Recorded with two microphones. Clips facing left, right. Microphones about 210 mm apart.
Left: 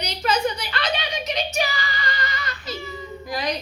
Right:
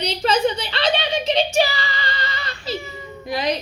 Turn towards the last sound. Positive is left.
turn(degrees=-25)  # may be behind; listen again after turning